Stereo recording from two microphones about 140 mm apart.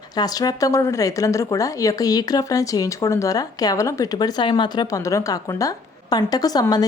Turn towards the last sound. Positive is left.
turn(degrees=25)  # may be behind; listen again after turning